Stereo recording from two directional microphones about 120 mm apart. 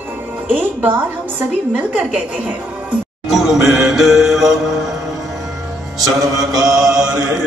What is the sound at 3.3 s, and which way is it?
Music, centre (ahead or behind).